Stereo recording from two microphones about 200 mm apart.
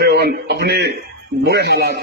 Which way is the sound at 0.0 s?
55° right (ahead or behind).